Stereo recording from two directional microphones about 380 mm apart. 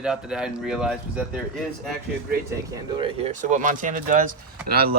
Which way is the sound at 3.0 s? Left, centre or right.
Centre.